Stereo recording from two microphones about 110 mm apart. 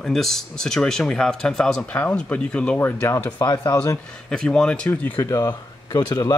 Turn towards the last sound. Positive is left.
turn(degrees=35)  # may be behind; listen again after turning